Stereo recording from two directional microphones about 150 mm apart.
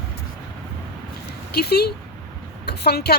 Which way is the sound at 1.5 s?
90° left.